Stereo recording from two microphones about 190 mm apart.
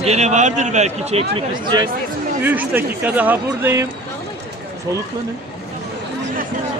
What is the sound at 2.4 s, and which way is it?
Speech, 10° right (ahead or behind).